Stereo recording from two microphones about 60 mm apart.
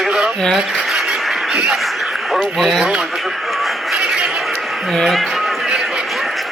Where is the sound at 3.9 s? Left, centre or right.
Centre.